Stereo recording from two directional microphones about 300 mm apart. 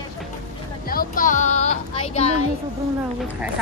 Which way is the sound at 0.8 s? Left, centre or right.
Left.